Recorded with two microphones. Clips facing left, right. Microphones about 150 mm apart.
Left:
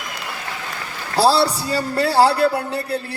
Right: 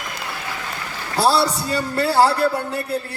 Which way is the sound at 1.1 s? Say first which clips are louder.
Left 2 dB; 30° left (ahead or behind).